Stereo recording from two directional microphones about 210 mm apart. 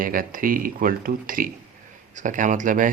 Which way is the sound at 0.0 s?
40° right (ahead or behind).